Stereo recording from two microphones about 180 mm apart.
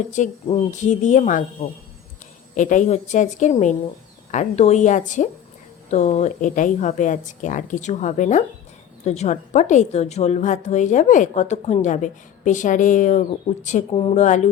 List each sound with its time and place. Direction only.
0.2 s a woman's voice: 45° left (ahead or behind)
2.6 s a woman's voice: 45° left (ahead or behind)